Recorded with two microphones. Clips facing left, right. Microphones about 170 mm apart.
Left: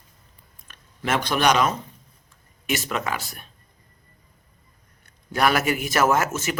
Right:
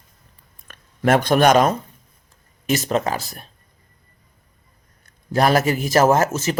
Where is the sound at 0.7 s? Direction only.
50° right (ahead or behind).